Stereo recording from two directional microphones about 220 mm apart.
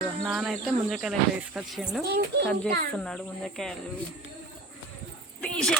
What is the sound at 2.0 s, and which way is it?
Speech, 50° right (ahead or behind).